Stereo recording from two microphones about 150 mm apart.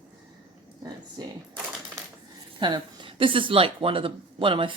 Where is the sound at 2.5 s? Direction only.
30° right (ahead or behind).